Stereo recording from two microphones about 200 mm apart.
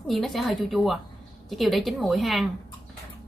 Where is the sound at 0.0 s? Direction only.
Centre (ahead or behind).